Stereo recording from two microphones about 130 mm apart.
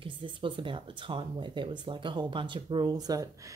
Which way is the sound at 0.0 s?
40° right (ahead or behind).